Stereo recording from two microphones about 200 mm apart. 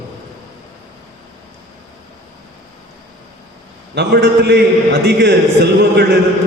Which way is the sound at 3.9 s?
55° right (ahead or behind).